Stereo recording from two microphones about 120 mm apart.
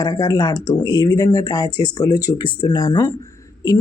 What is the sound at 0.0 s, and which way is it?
Speech, 30° left (ahead or behind).